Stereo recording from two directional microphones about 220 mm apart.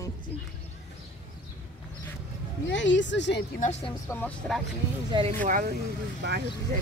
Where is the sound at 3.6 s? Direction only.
30° left (ahead or behind).